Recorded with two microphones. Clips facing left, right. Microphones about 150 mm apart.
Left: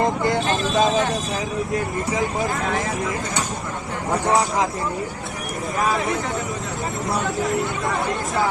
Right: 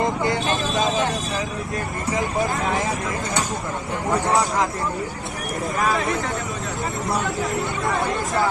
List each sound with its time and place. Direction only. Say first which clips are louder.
0.4 s vehicle: left 3 dB; 50° left (ahead or behind)
7.1 s speech: left 2 dB; centre (ahead or behind)